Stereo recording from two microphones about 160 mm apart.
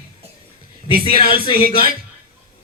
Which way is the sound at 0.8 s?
30° left (ahead or behind).